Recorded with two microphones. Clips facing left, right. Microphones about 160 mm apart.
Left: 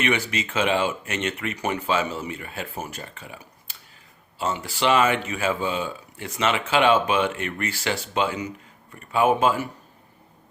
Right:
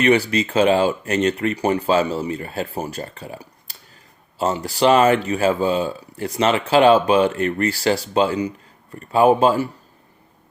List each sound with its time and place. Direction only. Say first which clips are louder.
0.0 s speech: right 8 dB; 35° right (ahead or behind)